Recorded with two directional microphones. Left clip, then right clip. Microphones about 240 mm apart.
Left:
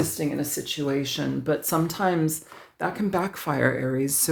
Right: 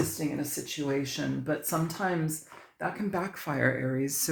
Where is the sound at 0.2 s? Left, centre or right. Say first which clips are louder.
Left 5 dB; left.